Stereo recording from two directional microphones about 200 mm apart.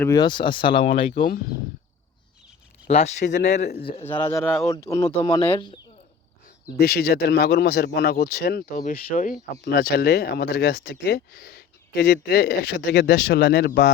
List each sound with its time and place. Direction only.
0.0 s speech: 20° left (ahead or behind)
0.9 s speech: 35° left (ahead or behind)
2.8 s speech: 35° left (ahead or behind)
3.6 s speech: 50° left (ahead or behind)
4.2 s speech: 15° left (ahead or behind)
6.7 s speech: 50° left (ahead or behind)
9.6 s speech: 55° left (ahead or behind)